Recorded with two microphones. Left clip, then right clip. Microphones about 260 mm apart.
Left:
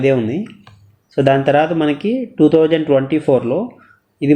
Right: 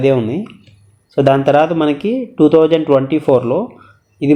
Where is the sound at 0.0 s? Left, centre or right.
Centre.